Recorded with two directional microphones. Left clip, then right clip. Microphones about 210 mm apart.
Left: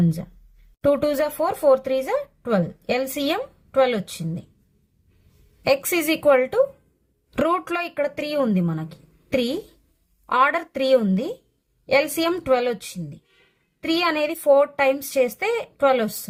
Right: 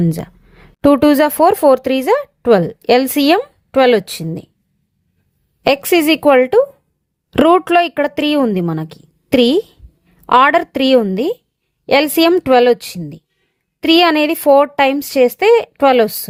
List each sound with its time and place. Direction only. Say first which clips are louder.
0.8 s speech: right 9 dB; 40° right (ahead or behind)
5.6 s speech: right 8 dB; 35° right (ahead or behind)